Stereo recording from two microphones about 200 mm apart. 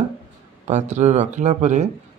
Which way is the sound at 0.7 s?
35° right (ahead or behind).